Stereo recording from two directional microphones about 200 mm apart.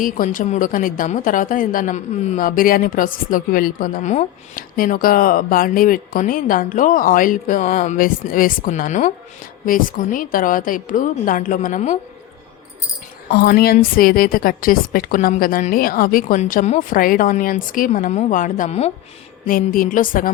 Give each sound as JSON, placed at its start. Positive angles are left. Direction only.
{"t": 0.0, "sound": "a woman's voice", "side_deg": 40}
{"t": 13.3, "sound": "a woman's voice", "side_deg": 50}